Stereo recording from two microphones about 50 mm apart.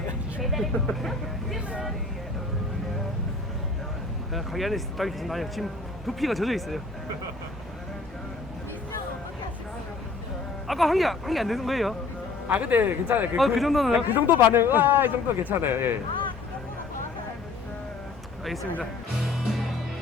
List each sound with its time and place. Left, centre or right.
0.4 s vehicle: centre
4.4 s speech: centre
10.7 s speech: centre
12.5 s a man's voice: right
13.3 s speech: centre
14.1 s a man's voice: right